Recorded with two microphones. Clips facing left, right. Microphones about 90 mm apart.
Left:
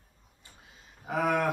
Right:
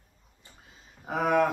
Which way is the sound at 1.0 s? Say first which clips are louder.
Right 3 dB; 20° right (ahead or behind).